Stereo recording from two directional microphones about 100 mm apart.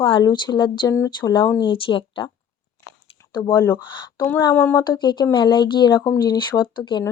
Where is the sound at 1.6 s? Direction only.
60° left (ahead or behind).